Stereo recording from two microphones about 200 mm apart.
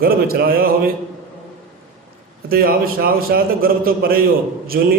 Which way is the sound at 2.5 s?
45° right (ahead or behind).